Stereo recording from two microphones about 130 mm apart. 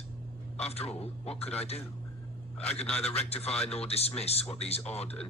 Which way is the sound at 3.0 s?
50° left (ahead or behind).